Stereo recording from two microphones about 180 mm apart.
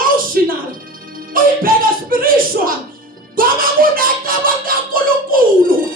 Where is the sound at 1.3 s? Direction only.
50° right (ahead or behind).